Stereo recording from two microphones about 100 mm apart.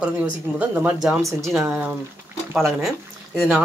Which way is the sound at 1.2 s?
30° right (ahead or behind).